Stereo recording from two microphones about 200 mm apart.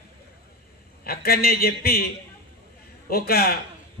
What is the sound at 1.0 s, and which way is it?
A man's voice, 50° left (ahead or behind).